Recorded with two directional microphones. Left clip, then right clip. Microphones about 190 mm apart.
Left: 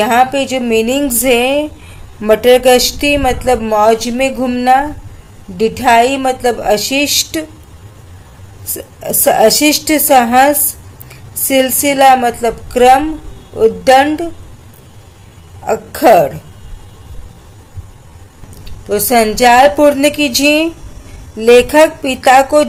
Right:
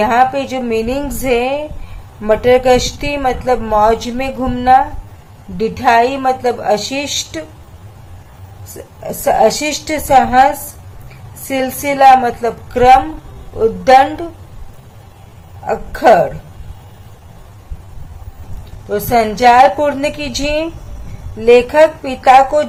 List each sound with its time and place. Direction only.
0.0 s speech: 25° left (ahead or behind)
9.0 s speech: 30° left (ahead or behind)
15.6 s speech: 25° left (ahead or behind)
18.9 s speech: 30° left (ahead or behind)